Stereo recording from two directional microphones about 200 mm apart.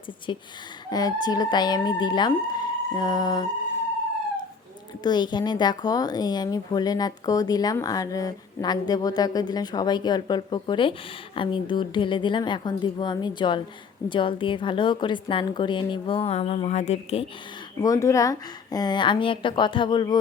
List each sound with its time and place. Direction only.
0.3 s speech: 25° left (ahead or behind)
5.0 s speech: 20° left (ahead or behind)
17.8 s speech: 15° left (ahead or behind)